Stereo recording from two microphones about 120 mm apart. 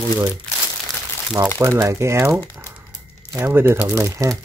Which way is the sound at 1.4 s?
25° right (ahead or behind).